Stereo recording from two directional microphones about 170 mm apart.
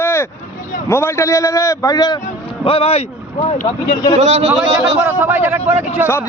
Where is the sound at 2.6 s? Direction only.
35° left (ahead or behind).